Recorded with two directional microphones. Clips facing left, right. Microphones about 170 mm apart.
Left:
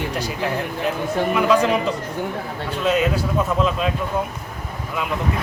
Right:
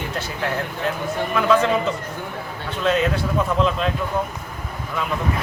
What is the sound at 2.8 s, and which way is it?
A man's voice, 5° left (ahead or behind).